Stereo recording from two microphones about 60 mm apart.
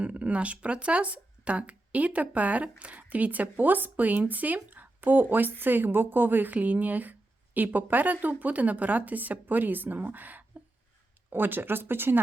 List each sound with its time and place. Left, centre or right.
0.0 s speech: right